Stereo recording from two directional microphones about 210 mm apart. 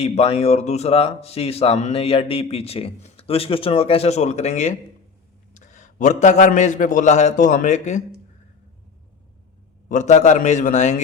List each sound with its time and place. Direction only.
0.0 s a man's voice: 30° left (ahead or behind)
9.9 s a man's voice: 35° left (ahead or behind)